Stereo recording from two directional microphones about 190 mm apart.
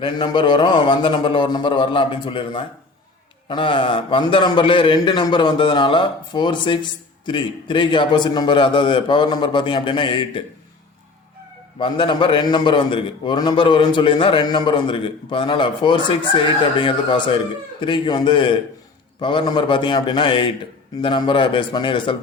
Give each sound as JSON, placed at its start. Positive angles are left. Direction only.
{"t": 0.0, "sound": "a man's voice", "side_deg": 25}
{"t": 11.8, "sound": "a man's voice", "side_deg": 25}